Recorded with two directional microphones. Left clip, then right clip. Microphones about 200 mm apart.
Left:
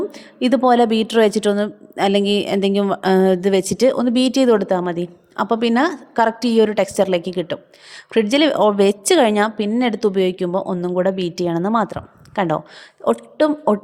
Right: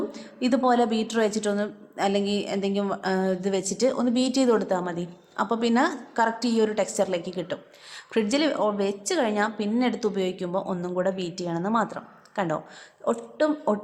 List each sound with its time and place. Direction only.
0.1 s a woman's voice: 40° left (ahead or behind)